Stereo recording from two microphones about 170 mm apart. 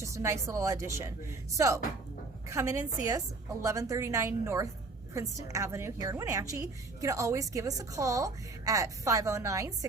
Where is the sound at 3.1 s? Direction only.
20° right (ahead or behind).